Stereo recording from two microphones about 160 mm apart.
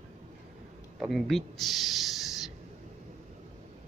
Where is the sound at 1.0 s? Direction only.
Centre (ahead or behind).